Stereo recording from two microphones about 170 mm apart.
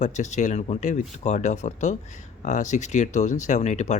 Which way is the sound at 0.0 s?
45° left (ahead or behind).